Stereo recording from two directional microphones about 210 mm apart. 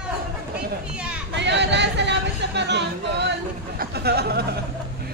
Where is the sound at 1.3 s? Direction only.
55° right (ahead or behind).